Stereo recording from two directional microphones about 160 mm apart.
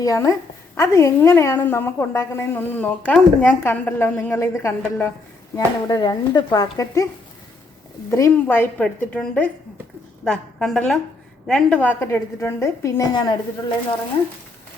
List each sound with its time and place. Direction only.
0.0 s a child's voice: 20° left (ahead or behind)
5.5 s a child's voice: 25° left (ahead or behind)
8.1 s a woman's voice: 15° left (ahead or behind)